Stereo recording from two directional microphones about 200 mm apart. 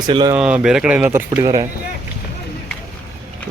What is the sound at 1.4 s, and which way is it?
Speech, 20° right (ahead or behind).